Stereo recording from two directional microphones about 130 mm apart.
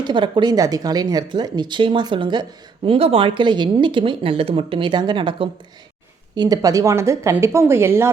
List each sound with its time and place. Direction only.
0.0 s a woman's voice: 35° right (ahead or behind); by 8.1 s 20° right (ahead or behind)